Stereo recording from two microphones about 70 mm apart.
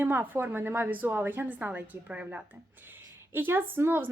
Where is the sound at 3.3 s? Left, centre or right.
Right.